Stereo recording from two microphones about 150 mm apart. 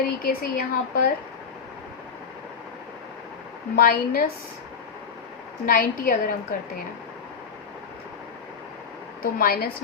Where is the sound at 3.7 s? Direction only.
80° left.